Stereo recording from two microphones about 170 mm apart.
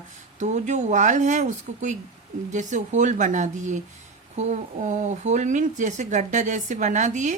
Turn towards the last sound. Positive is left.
turn(degrees=-45)  # may be behind; listen again after turning